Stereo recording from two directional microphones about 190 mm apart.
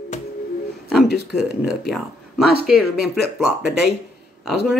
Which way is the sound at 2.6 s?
5° right (ahead or behind).